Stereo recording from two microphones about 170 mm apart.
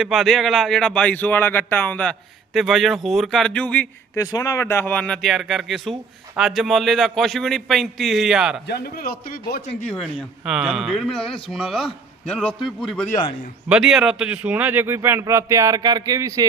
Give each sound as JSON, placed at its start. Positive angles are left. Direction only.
{"t": 0.0, "sound": "speech", "side_deg": 0}
{"t": 4.2, "sound": "speech", "side_deg": 20}
{"t": 8.6, "sound": "a man's voice", "side_deg": 65}
{"t": 10.4, "sound": "a man's voice", "side_deg": -5}